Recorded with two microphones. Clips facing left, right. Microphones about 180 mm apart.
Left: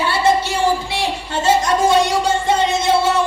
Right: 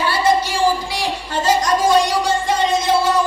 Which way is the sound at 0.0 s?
25° left (ahead or behind).